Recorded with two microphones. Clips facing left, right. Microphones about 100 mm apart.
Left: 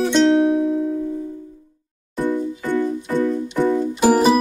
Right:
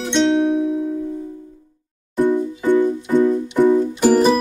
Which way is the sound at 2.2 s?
20° right (ahead or behind).